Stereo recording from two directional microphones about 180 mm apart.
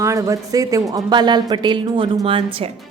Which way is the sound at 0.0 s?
15° right (ahead or behind).